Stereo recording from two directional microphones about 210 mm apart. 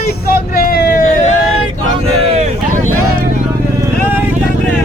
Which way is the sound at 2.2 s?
30° right (ahead or behind).